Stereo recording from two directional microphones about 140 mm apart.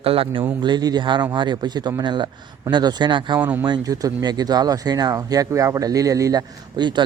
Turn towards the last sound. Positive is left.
turn(degrees=-30)  # may be behind; listen again after turning